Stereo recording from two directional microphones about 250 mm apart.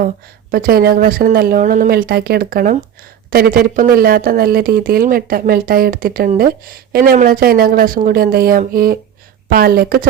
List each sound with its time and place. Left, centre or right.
0.5 s speech: right